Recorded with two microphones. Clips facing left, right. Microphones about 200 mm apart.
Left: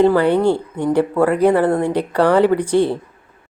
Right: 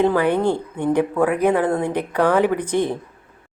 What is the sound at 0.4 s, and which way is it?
Speech, 10° left (ahead or behind).